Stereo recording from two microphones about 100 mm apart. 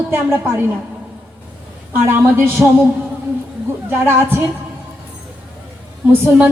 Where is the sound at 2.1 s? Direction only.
20° right (ahead or behind).